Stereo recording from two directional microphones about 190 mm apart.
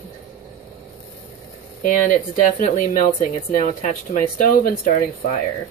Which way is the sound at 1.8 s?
40° left (ahead or behind).